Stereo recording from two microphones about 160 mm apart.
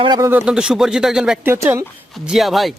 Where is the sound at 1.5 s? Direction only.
15° right (ahead or behind).